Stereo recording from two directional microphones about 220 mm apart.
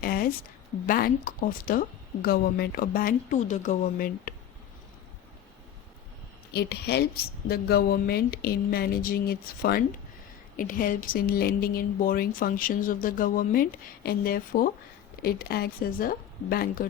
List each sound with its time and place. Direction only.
0.0 s a woman's voice: 45° left (ahead or behind)
6.5 s a woman's voice: 45° left (ahead or behind)